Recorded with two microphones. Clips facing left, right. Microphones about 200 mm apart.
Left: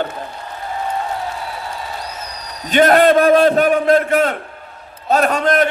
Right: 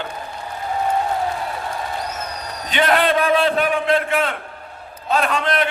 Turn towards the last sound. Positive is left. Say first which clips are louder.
# left 5 dB
turn(degrees=45)  # may be behind; listen again after turning